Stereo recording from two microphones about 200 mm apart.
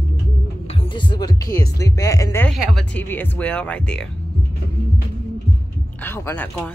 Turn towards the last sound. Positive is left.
turn(degrees=10)  # may be behind; listen again after turning